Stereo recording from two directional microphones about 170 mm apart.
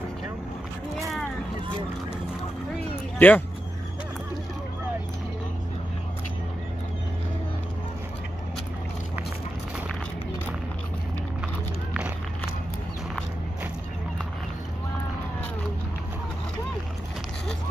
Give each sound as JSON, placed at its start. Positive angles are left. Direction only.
{"t": 3.2, "sound": "speech", "side_deg": 10}